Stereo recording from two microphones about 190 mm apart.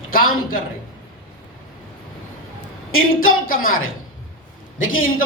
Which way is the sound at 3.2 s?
50° left (ahead or behind).